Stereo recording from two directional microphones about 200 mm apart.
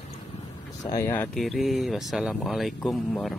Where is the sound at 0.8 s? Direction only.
15° left (ahead or behind).